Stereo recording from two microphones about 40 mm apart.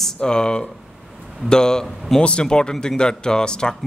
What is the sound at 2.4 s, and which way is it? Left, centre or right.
Speech, centre.